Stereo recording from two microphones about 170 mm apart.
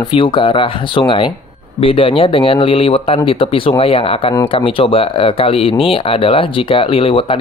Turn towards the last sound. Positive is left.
turn(degrees=30)  # may be behind; listen again after turning